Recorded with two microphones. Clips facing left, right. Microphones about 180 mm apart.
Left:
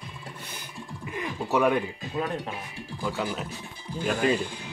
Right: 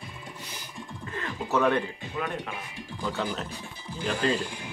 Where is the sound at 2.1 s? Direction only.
30° left (ahead or behind).